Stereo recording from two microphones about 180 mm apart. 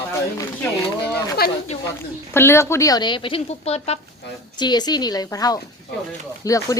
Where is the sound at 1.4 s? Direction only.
55° left (ahead or behind).